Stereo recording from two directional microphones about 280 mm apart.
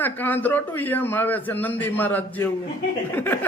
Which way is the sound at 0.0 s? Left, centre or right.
Centre.